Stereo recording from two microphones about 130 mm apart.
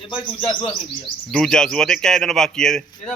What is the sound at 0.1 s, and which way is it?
Speech, 40° left (ahead or behind).